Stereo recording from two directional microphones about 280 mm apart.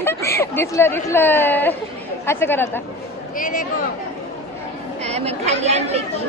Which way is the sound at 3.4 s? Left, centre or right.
Left.